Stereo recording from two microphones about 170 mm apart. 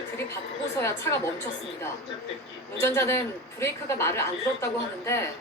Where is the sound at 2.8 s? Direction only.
15° left (ahead or behind).